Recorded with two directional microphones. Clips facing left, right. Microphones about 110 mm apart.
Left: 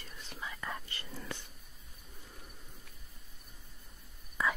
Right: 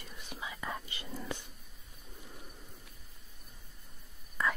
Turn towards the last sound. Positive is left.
turn(degrees=5)  # may be behind; listen again after turning